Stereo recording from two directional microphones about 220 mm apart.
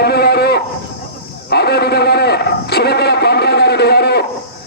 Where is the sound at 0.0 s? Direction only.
45° left (ahead or behind).